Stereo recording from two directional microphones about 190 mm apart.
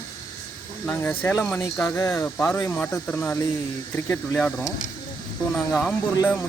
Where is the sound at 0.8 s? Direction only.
10° left (ahead or behind).